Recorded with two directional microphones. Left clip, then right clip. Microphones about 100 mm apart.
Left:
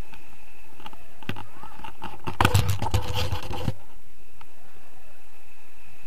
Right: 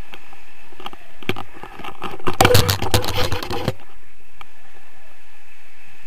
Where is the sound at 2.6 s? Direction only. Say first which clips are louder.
Right 11 dB; 45° right (ahead or behind).